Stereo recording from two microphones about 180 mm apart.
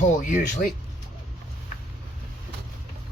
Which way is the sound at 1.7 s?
40° left (ahead or behind).